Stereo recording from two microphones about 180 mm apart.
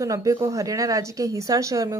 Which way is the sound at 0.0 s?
20° right (ahead or behind).